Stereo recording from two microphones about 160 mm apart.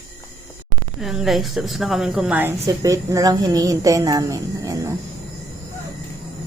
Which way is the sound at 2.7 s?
20° right (ahead or behind).